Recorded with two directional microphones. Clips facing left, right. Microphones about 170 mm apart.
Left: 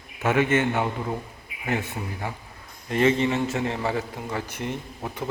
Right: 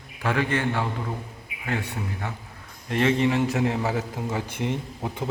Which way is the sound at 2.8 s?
5° left (ahead or behind).